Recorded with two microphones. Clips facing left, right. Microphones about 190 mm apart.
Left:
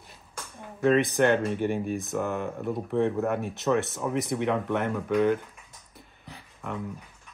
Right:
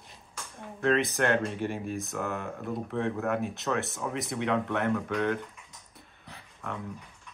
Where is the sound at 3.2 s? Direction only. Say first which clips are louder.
Left 3 dB; centre (ahead or behind).